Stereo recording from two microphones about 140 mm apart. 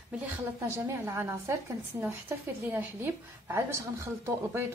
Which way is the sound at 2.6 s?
15° right (ahead or behind).